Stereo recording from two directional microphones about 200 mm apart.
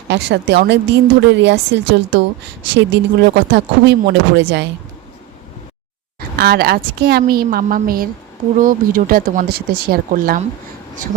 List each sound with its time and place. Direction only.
0.1 s a woman's voice: 60° right (ahead or behind)
6.1 s a woman's voice: 50° right (ahead or behind)